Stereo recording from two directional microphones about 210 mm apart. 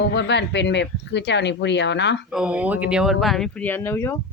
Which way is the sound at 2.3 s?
5° right (ahead or behind).